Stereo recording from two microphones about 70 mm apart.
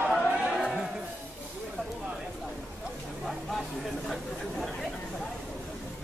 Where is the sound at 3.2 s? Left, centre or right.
Centre.